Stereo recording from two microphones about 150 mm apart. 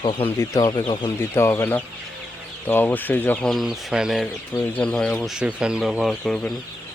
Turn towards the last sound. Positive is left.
turn(degrees=5)  # may be behind; listen again after turning